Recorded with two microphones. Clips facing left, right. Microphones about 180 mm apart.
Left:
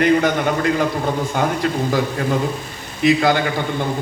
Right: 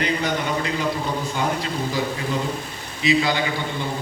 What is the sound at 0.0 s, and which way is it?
A man's voice, 50° left (ahead or behind).